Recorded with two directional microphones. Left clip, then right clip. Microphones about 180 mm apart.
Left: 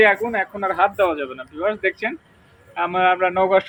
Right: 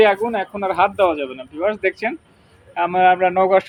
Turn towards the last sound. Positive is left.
turn(degrees=-20)  # may be behind; listen again after turning